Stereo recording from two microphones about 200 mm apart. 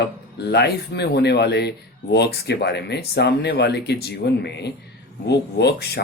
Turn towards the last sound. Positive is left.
turn(degrees=55)  # may be behind; listen again after turning